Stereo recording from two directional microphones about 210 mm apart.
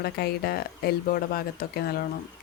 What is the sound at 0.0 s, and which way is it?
Speech, 50° left (ahead or behind).